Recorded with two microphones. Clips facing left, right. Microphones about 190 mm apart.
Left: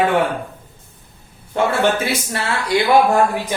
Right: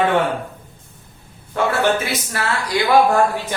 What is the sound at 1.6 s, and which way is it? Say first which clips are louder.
Speech: left 1 dB; 25° left (ahead or behind).